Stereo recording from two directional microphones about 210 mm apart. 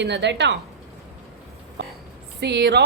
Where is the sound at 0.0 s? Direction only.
55° right (ahead or behind).